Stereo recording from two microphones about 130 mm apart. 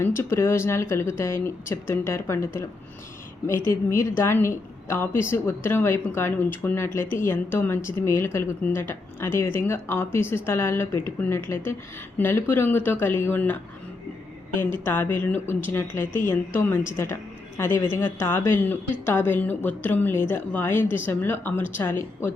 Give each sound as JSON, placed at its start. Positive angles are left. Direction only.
{"t": 0.0, "sound": "speech", "side_deg": 20}
{"t": 14.6, "sound": "speech", "side_deg": 15}